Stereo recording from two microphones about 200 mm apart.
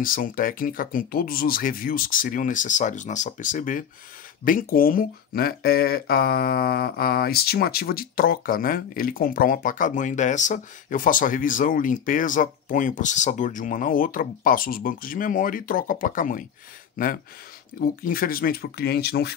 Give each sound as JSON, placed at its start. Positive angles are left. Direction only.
{"t": 0.0, "sound": "speech", "side_deg": 45}